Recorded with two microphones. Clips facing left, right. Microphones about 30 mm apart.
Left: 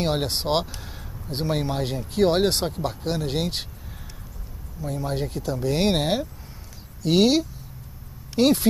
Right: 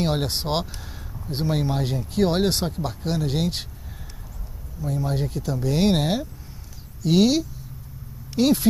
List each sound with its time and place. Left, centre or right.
0.0 s speech: centre
4.8 s speech: centre